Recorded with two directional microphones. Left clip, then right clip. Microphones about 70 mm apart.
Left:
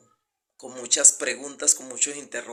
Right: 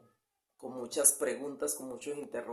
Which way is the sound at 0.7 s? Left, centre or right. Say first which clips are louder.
Left 10 dB; right.